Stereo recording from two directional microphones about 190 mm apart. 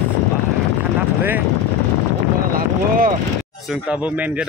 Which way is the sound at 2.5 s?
50° right (ahead or behind).